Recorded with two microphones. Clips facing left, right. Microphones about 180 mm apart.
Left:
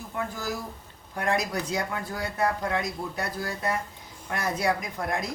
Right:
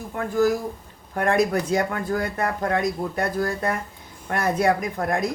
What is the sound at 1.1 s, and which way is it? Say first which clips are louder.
Speech: right 7 dB; 55° right (ahead or behind).